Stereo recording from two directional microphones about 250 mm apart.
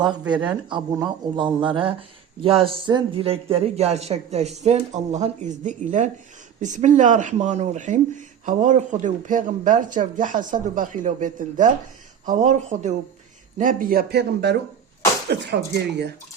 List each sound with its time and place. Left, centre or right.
0.0 s speech: centre; by 16.1 s right